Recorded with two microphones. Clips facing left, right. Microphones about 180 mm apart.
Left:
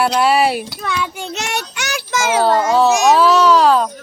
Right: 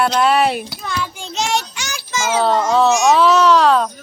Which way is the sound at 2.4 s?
5° left (ahead or behind).